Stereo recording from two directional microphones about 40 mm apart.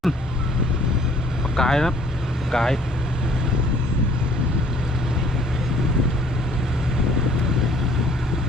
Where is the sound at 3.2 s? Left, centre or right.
Centre.